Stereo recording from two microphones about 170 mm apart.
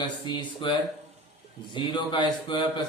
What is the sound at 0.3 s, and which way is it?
Speech, 25° left (ahead or behind).